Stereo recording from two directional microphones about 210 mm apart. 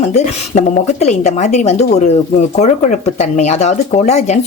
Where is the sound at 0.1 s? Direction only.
35° left (ahead or behind).